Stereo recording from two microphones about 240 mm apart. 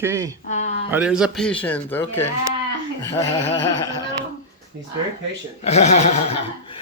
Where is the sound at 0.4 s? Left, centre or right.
Left.